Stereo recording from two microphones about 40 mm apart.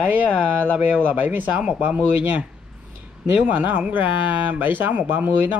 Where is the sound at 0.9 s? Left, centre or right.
Right.